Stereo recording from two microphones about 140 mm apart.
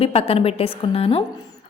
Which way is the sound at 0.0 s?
45° left (ahead or behind).